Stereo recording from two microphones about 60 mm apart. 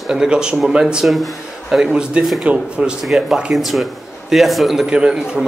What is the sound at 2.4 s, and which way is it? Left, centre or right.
Speech, centre.